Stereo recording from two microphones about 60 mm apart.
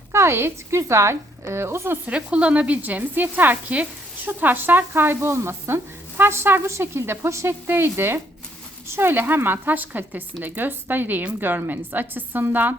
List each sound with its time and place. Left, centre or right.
0.1 s a woman's voice: right
2.0 s a woman's voice: centre